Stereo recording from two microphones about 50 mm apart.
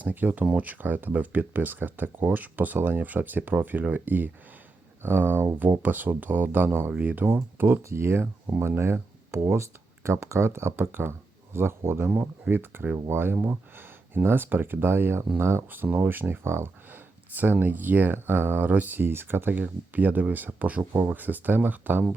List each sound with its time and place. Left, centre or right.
0.0 s speech: right
5.5 s speech: right
7.0 s speech: right
7.8 s speech: right
8.4 s speech: right
13.1 s speech: right
17.3 s speech: right
19.5 s speech: right